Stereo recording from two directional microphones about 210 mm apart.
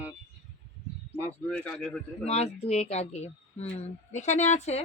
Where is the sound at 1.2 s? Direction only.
5° left (ahead or behind).